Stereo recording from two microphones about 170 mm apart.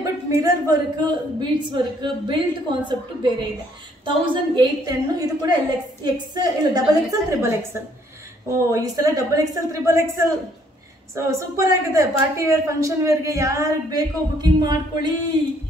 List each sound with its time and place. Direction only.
0.0 s a woman's voice: 20° right (ahead or behind)